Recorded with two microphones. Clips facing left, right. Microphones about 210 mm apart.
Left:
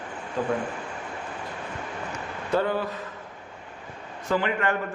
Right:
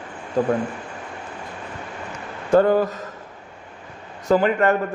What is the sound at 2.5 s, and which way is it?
Speech, 45° right (ahead or behind).